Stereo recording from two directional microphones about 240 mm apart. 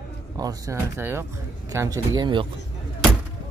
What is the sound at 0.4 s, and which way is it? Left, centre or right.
Speech, centre.